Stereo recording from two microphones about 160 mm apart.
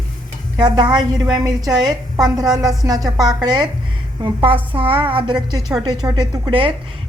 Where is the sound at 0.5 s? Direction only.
25° right (ahead or behind).